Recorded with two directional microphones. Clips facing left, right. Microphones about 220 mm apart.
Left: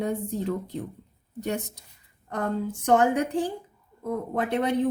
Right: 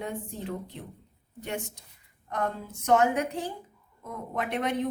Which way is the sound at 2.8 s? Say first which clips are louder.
Left 2 dB; 30° left (ahead or behind).